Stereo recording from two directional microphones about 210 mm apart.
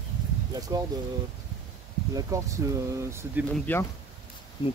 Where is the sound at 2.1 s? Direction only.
15° right (ahead or behind).